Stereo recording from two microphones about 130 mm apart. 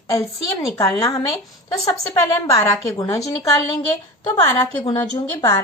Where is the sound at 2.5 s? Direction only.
25° left (ahead or behind).